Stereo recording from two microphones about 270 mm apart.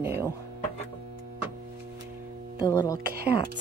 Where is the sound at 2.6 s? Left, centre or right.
Centre.